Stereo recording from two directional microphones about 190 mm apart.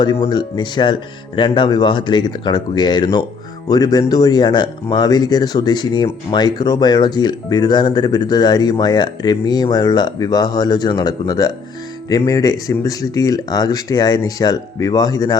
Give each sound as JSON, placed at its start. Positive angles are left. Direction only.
{"t": 0.0, "sound": "speech", "side_deg": 25}